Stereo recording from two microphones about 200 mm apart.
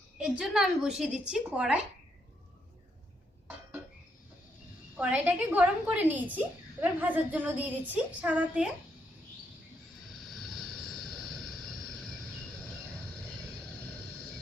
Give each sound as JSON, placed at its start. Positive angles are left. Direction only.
{"t": 0.2, "sound": "a woman's voice", "side_deg": -5}
{"t": 4.9, "sound": "a woman's voice", "side_deg": -5}
{"t": 10.2, "sound": "vehicle", "side_deg": 0}